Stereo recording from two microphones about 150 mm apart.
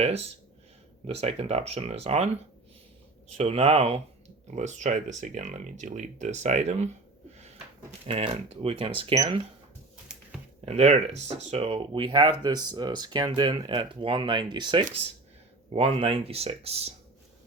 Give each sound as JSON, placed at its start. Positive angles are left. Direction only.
{"t": 1.0, "sound": "speech", "side_deg": -40}
{"t": 3.3, "sound": "speech", "side_deg": -45}
{"t": 9.1, "sound": "speech", "side_deg": -25}
{"t": 10.7, "sound": "speech", "side_deg": -45}